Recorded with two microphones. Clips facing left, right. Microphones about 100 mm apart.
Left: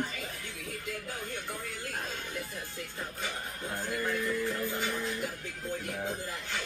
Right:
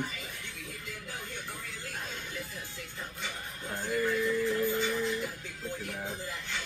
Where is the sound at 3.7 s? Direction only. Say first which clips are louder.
Right 2 dB; 5° left (ahead or behind).